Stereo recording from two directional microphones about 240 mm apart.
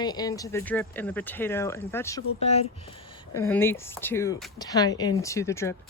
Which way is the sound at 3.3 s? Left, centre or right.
Centre.